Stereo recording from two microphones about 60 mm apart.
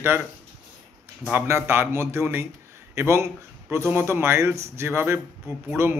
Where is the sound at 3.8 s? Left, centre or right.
Right.